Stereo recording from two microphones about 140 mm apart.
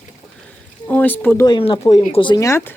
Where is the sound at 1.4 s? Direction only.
35° left (ahead or behind).